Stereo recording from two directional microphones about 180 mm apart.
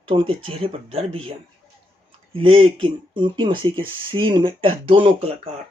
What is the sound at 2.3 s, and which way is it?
Speech, 30° right (ahead or behind).